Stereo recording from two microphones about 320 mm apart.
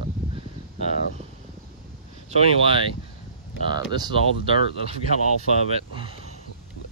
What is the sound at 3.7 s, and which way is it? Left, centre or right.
Speech, centre.